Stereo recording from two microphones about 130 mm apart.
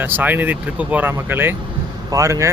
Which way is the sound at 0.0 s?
15° right (ahead or behind).